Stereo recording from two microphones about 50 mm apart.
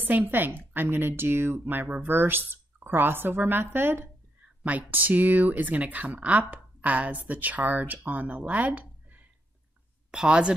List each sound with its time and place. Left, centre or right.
0.0 s a woman's voice: right
4.6 s speech: right
10.1 s a woman's voice: centre